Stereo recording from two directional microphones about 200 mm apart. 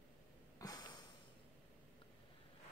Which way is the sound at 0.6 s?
20° left (ahead or behind).